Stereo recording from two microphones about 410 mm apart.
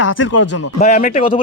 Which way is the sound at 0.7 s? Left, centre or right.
Centre.